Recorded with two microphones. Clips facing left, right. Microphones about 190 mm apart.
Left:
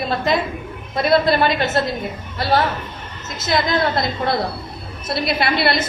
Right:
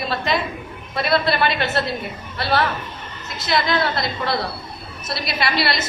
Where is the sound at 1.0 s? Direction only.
45° left (ahead or behind).